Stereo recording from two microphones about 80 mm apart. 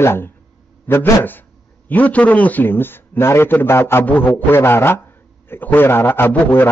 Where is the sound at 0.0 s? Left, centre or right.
Left.